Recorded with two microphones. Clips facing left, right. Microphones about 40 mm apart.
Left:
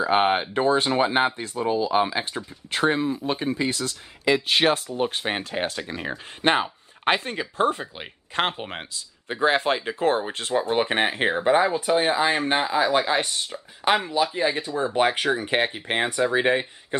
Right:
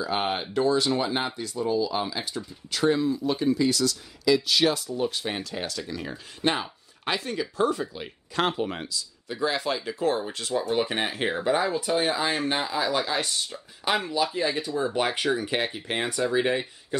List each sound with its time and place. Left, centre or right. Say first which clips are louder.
0.0 s speech: left 7 dB; left; by 15.4 s centre
15.4 s speech: left 4 dB; left